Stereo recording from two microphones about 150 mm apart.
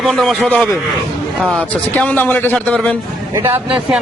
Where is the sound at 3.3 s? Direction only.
15° right (ahead or behind).